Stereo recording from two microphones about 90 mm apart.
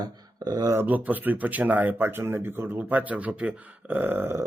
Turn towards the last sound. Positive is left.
turn(degrees=-25)  # may be behind; listen again after turning